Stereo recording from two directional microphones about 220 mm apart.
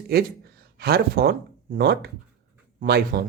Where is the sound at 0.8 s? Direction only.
45° right (ahead or behind).